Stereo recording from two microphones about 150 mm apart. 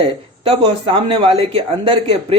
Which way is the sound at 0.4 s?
35° right (ahead or behind).